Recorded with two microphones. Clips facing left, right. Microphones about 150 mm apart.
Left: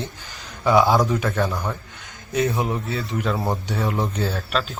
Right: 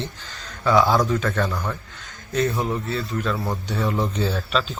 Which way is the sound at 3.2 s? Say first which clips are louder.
Left 2 dB; 25° left (ahead or behind).